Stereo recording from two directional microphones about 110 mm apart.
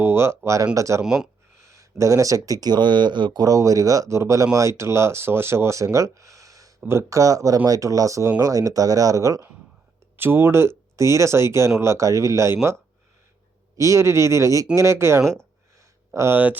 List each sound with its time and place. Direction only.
0.0 s speech: 25° right (ahead or behind)
1.0 s speech: 5° right (ahead or behind)
1.6 s speech: 30° right (ahead or behind)
13.7 s speech: 30° right (ahead or behind)